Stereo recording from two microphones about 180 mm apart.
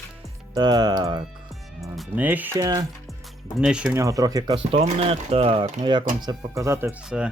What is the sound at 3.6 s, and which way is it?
Speech, 5° right (ahead or behind).